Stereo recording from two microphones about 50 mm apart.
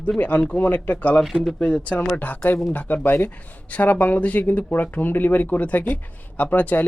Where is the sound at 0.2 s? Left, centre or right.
Left.